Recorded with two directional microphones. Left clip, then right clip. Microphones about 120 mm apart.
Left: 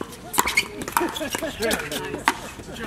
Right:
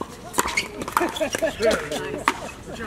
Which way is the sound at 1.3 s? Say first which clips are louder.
Right 4 dB; 10° left (ahead or behind).